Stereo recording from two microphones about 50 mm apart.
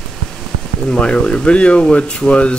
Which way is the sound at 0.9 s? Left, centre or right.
Centre.